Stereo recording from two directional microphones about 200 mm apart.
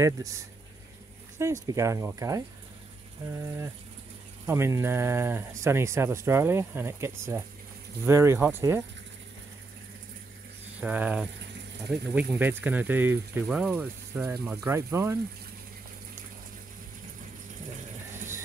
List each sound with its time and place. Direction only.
0.0 s speech: 15° right (ahead or behind)
1.4 s speech: 15° right (ahead or behind)
10.8 s speech: 5° right (ahead or behind)